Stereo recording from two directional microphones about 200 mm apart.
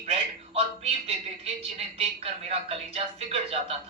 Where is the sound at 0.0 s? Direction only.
30° right (ahead or behind).